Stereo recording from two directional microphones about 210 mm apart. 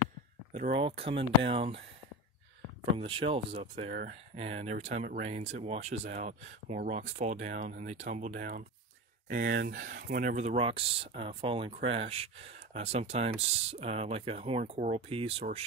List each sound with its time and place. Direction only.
0.5 s speech: 35° right (ahead or behind)
3.0 s speech: 25° right (ahead or behind)
9.3 s speech: 50° right (ahead or behind); by 15.6 s 30° right (ahead or behind)